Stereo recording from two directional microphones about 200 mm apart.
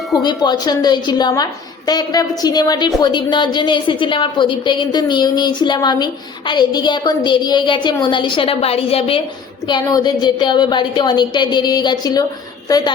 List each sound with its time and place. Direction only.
0.2 s a woman's voice: 20° left (ahead or behind)